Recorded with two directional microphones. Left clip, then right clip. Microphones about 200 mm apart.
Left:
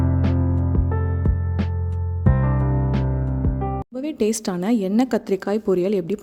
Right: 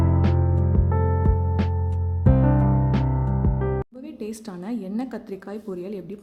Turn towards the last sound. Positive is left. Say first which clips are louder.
# left 13 dB
turn(degrees=40)  # may be behind; listen again after turning